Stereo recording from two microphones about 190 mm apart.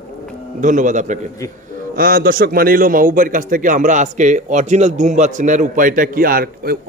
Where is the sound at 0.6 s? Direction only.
40° right (ahead or behind).